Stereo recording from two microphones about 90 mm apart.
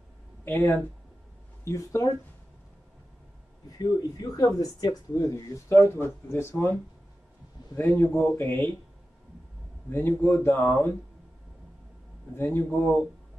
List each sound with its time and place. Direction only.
0.5 s speech: 25° left (ahead or behind)
1.6 s speech: 35° left (ahead or behind)
3.8 s speech: 45° left (ahead or behind); by 8.7 s 25° left (ahead or behind)
9.8 s speech: 25° left (ahead or behind)
12.4 s speech: 25° left (ahead or behind)